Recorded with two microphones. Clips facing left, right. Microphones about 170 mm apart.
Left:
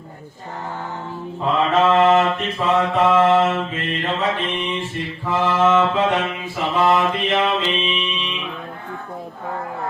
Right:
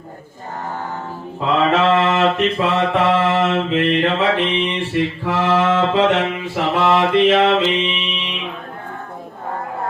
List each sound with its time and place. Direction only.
1.5 s mantra: 75° right (ahead or behind)